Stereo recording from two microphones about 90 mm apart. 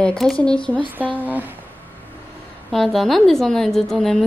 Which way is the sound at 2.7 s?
5° left (ahead or behind).